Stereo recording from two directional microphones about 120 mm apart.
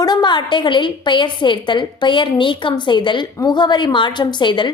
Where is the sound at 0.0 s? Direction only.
35° left (ahead or behind).